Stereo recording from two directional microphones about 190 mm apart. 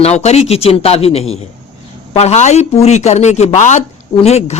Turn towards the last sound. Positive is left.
turn(degrees=35)  # may be behind; listen again after turning